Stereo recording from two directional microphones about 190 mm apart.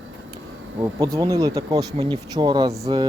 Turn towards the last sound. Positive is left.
turn(degrees=-20)  # may be behind; listen again after turning